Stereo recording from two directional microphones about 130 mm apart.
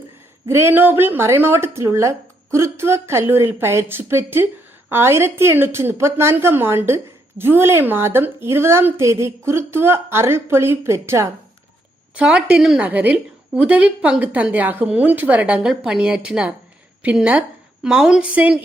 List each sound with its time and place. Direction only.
0.4 s a woman's voice: 20° right (ahead or behind)
12.1 s a woman's voice: 10° right (ahead or behind)